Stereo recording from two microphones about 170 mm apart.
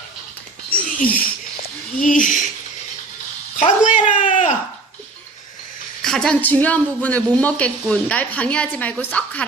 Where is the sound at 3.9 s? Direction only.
45° left (ahead or behind).